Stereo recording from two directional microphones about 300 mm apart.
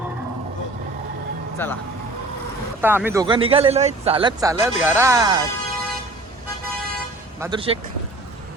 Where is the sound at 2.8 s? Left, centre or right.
Centre.